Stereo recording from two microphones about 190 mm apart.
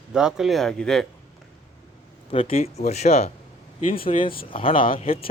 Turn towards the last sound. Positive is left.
turn(degrees=30)  # may be behind; listen again after turning